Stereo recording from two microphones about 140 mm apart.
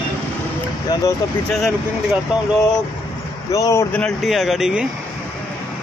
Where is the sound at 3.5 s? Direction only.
25° left (ahead or behind).